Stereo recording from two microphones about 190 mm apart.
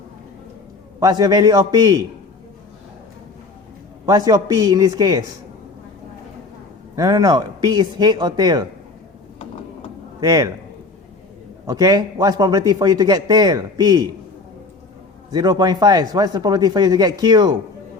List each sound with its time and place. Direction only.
0.9 s a man's voice: 20° right (ahead or behind)
4.0 s a man's voice: 20° right (ahead or behind)
6.9 s a man's voice: 20° right (ahead or behind)
10.2 s a man's voice: 15° right (ahead or behind)
11.6 s a man's voice: 20° right (ahead or behind)
15.3 s a man's voice: 20° right (ahead or behind)